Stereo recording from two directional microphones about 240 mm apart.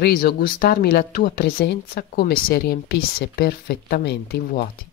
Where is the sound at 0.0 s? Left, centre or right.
Left.